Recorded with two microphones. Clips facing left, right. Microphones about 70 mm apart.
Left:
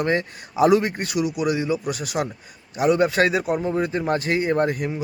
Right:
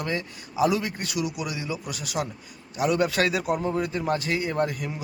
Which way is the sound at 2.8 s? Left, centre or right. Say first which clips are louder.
Left 5 dB; left.